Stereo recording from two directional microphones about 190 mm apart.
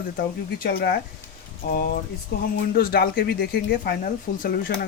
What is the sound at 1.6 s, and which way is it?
Speech, 45° left (ahead or behind).